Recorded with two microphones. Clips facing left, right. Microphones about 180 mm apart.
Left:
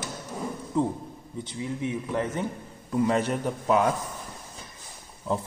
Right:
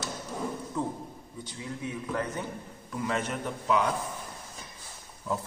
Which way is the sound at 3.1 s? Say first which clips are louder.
Left 6 dB; 35° left (ahead or behind).